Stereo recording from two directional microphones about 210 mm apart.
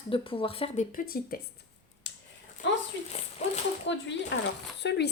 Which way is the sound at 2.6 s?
60° left (ahead or behind).